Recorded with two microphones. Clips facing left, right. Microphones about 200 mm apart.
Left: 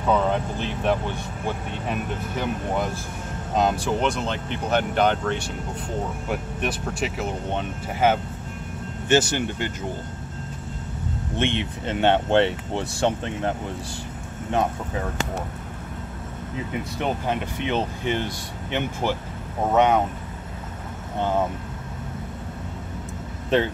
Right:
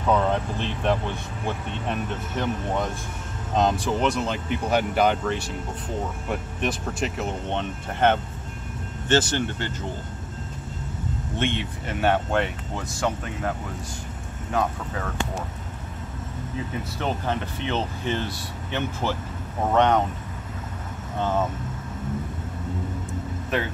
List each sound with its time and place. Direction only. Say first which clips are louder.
0.0 s speech: left 1 dB; centre (ahead or behind)
11.3 s speech: left 2 dB; 20° left (ahead or behind)
17.0 s speech: left 1 dB; 15° left (ahead or behind)
21.2 s speech: left 1 dB; 15° left (ahead or behind)